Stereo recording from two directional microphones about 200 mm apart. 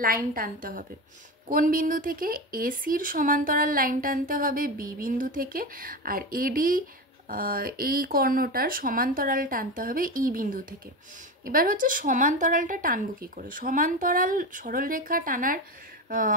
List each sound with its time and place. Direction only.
0.0 s speech: 45° right (ahead or behind)